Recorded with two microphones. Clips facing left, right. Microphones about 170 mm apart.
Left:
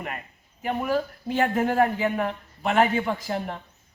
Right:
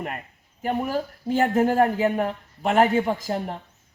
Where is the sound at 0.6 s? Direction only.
35° right (ahead or behind).